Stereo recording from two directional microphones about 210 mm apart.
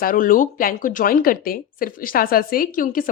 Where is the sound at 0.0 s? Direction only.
40° left (ahead or behind).